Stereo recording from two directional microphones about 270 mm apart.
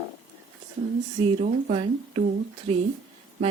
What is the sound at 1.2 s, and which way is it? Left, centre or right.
Speech, right.